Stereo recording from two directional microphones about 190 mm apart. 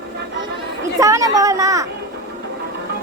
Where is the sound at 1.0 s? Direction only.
20° right (ahead or behind).